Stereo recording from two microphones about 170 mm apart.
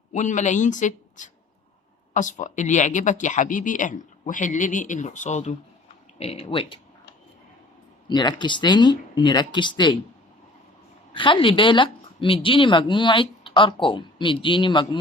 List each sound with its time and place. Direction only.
0.1 s speech: 45° left (ahead or behind)
8.0 s a woman's voice: 25° left (ahead or behind)
11.1 s a woman's voice: 30° left (ahead or behind)